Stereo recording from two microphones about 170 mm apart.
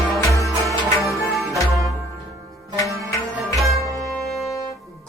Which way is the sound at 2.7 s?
20° left (ahead or behind).